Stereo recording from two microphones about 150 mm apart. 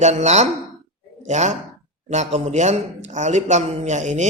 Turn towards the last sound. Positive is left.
turn(degrees=-50)  # may be behind; listen again after turning